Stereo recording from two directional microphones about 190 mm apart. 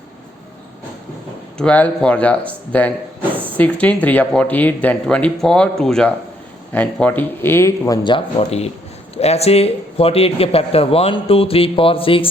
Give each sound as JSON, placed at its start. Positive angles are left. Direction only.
{"t": 1.5, "sound": "a man's voice", "side_deg": 5}